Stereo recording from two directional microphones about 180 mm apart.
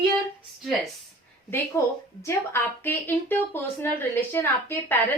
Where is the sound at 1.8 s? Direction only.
15° left (ahead or behind).